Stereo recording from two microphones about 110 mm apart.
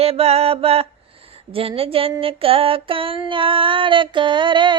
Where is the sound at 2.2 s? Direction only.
55° right (ahead or behind).